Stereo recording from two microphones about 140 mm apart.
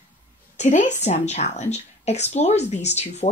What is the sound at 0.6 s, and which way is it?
Speech, 60° left (ahead or behind).